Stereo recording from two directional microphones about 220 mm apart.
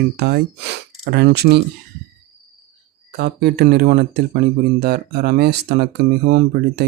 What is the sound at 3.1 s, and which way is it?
Speech, 50° right (ahead or behind).